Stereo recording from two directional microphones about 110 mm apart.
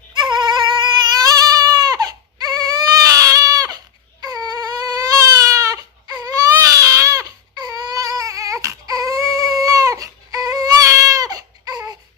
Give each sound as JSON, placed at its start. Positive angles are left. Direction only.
{"t": 0.1, "sound": "goat", "side_deg": -40}
{"t": 4.2, "sound": "baby cry", "side_deg": -35}